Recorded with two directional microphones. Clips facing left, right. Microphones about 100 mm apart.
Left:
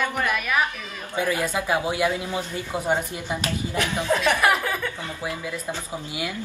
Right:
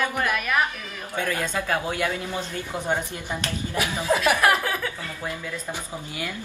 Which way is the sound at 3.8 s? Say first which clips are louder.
Even; 5° right (ahead or behind).